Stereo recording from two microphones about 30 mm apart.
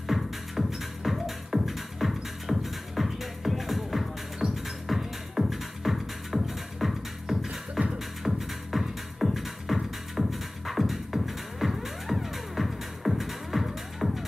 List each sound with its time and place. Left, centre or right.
0.1 s music: centre
4.4 s music: right
4.8 s music: centre